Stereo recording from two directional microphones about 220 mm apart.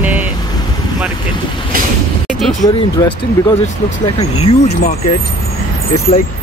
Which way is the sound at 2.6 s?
20° left (ahead or behind).